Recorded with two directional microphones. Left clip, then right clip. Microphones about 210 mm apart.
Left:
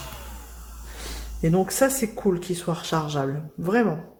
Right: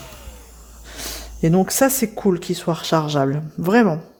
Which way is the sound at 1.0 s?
45° right (ahead or behind).